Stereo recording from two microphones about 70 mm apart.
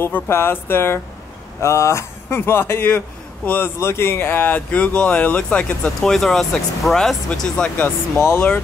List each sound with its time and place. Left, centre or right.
0.0 s speech: left
1.6 s speech: left
5.9 s speech: centre